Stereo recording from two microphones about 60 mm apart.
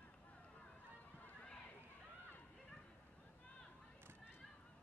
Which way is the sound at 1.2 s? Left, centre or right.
Left.